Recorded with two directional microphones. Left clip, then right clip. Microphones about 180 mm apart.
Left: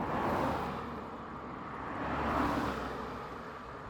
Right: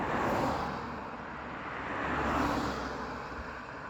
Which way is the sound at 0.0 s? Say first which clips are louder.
Right 2 dB; 50° right (ahead or behind).